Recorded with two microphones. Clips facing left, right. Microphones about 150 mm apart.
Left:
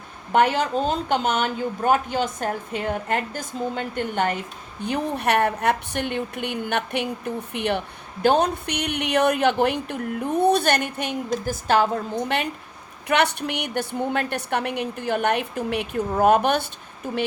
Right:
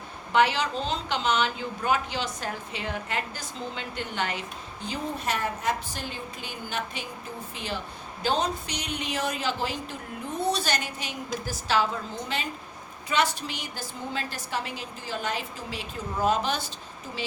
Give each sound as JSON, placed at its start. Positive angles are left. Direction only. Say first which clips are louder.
{"t": 0.3, "sound": "a woman's voice", "louder": "left 4 dB", "side_deg": 50}